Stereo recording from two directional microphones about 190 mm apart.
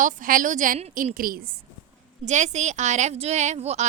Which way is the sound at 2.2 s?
40° right (ahead or behind).